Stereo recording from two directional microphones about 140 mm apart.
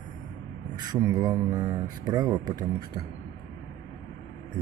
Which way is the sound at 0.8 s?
25° right (ahead or behind).